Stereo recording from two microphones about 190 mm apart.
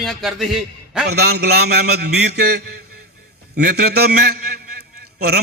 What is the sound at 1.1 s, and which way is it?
A man's voice, 55° right (ahead or behind).